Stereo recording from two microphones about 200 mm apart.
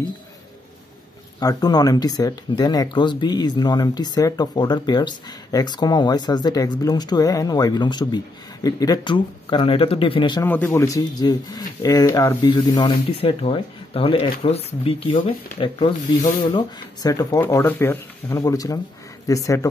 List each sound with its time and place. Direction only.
1.4 s speech: 20° left (ahead or behind)
10.4 s speech: 10° left (ahead or behind)